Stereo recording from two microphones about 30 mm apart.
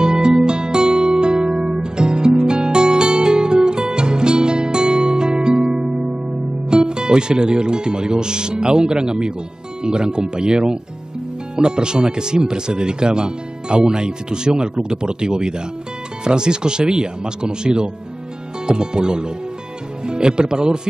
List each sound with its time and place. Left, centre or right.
0.0 s music: right
6.7 s speech: right